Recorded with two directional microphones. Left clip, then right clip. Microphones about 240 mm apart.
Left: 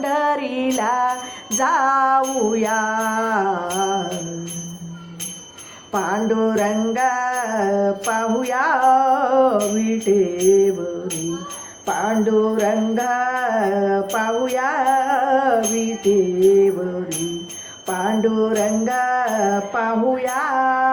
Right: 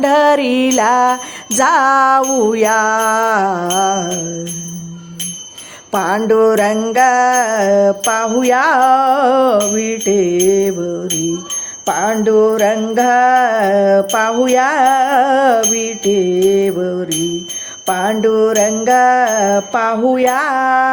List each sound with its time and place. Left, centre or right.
0.0 s jingle bell: right
5.9 s jingle bell: right
11.9 s jingle bell: right
17.8 s music: right